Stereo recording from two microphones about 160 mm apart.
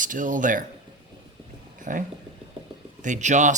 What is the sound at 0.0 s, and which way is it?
Speech, 55° right (ahead or behind).